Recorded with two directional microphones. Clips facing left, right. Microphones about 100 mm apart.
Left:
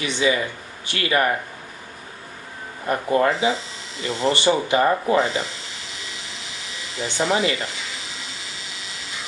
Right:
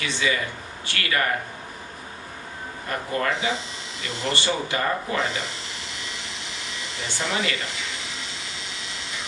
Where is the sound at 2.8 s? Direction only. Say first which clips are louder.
Left 7 dB; 25° left (ahead or behind).